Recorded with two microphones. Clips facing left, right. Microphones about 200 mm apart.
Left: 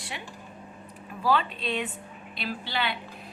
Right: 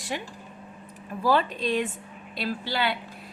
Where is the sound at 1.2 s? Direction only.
45° right (ahead or behind).